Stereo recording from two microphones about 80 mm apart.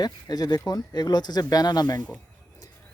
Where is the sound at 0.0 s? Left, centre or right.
Left.